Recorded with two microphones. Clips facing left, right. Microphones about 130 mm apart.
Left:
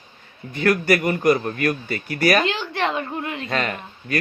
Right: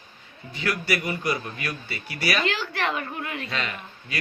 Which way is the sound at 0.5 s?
50° left (ahead or behind).